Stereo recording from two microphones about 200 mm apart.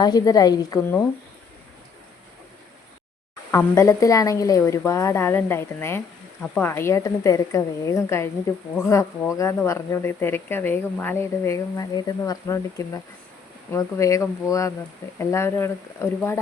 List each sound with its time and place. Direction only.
0.0 s a woman's voice: 20° left (ahead or behind)
3.5 s speech: 15° left (ahead or behind)